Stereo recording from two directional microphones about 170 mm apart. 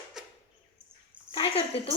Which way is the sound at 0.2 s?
5° right (ahead or behind).